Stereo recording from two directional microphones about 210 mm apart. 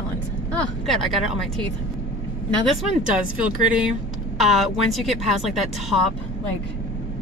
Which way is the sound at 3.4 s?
5° right (ahead or behind).